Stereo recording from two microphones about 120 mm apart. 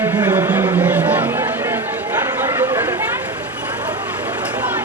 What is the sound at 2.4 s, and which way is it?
Chatter, 20° right (ahead or behind).